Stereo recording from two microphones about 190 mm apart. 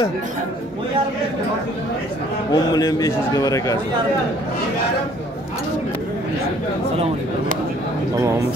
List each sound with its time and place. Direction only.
2.5 s a man's voice: 20° left (ahead or behind)